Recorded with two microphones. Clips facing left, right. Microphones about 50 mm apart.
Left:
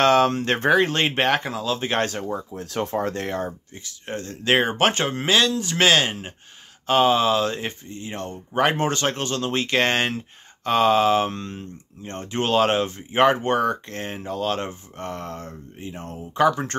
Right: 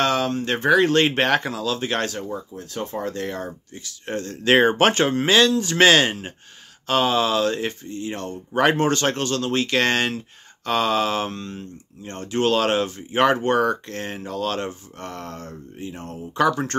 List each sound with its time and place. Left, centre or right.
0.0 s speech: left
0.7 s speech: centre
2.0 s speech: left
2.5 s speech: left
3.4 s speech: left